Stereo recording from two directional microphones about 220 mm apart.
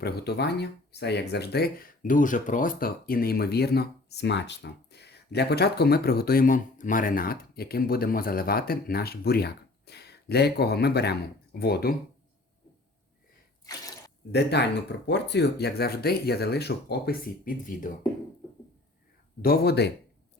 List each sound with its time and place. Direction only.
0.0 s speech: 45° left (ahead or behind)
14.3 s speech: 50° left (ahead or behind)
19.4 s speech: 45° left (ahead or behind)